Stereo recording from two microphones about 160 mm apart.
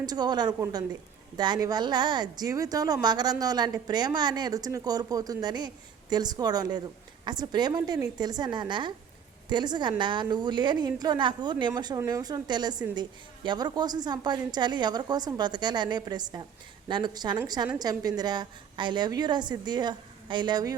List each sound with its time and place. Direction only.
0.0 s speech: 25° right (ahead or behind)